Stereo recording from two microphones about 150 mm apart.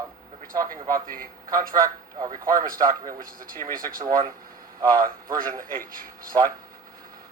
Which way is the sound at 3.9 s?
20° right (ahead or behind).